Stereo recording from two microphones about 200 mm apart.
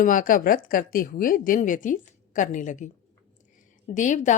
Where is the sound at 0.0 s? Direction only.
40° left (ahead or behind).